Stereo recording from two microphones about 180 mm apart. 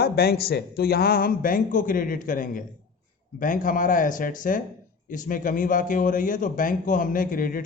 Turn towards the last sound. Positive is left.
turn(degrees=50)  # may be behind; listen again after turning